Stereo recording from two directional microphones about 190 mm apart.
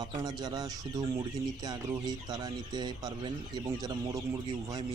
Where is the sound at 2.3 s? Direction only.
20° right (ahead or behind).